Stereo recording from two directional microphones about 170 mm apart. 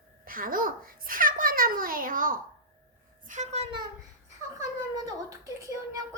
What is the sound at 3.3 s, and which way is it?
Speech, 45° right (ahead or behind).